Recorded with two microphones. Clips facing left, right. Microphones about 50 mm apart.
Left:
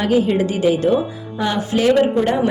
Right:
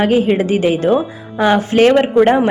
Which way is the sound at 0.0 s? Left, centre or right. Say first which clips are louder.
Right 3 dB; right.